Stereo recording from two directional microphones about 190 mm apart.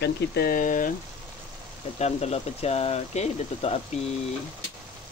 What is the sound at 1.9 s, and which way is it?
Speech, 35° left (ahead or behind).